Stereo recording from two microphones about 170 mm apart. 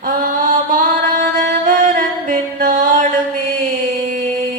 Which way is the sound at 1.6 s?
50° right (ahead or behind).